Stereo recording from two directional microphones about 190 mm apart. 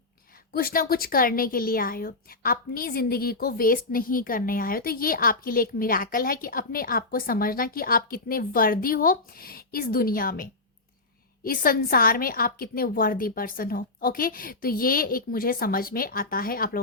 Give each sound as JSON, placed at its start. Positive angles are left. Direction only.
{"t": 0.5, "sound": "a woman's voice", "side_deg": 50}